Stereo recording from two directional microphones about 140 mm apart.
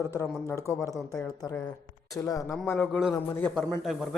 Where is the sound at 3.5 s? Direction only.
Centre (ahead or behind).